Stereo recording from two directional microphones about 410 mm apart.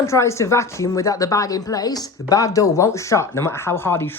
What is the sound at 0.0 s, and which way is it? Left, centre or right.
Speech, centre.